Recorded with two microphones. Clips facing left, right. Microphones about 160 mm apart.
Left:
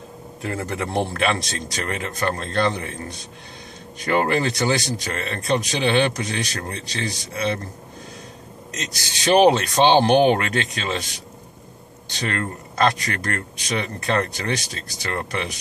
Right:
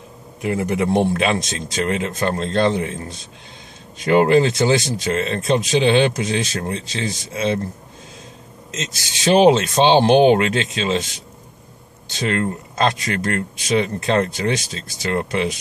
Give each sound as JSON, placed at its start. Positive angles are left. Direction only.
{"t": 0.4, "sound": "speech", "side_deg": -15}
{"t": 8.7, "sound": "speech", "side_deg": -20}
{"t": 12.1, "sound": "speech", "side_deg": -20}